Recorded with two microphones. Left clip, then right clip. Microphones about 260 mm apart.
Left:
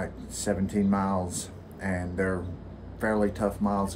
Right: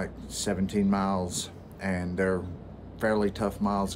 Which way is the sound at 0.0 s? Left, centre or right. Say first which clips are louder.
Even; centre.